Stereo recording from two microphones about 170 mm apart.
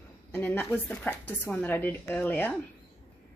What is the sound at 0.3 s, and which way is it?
A woman's voice, 10° left (ahead or behind).